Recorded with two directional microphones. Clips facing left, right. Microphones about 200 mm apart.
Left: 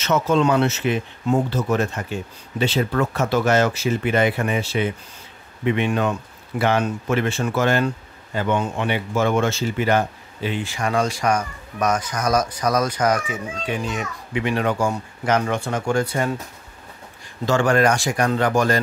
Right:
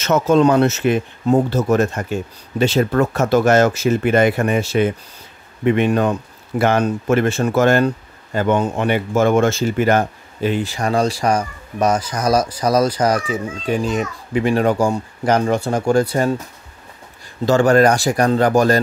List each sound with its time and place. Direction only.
0.0 s speech: 45° right (ahead or behind)
17.5 s speech: 35° right (ahead or behind)